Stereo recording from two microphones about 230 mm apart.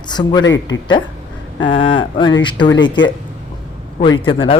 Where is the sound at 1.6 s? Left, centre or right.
Left.